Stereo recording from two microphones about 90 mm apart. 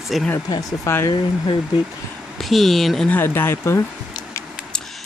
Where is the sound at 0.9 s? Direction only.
35° left (ahead or behind).